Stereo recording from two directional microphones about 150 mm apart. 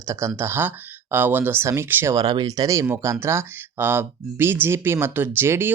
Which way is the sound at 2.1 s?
25° right (ahead or behind).